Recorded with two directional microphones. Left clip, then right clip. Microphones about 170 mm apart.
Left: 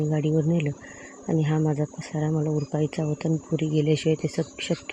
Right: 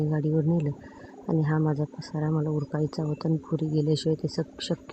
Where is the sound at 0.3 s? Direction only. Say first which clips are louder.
Left 2 dB; 10° left (ahead or behind).